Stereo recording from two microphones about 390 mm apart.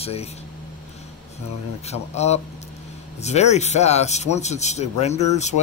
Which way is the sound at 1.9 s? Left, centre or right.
Centre.